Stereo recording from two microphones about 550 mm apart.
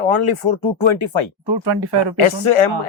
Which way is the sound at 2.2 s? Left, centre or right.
Left.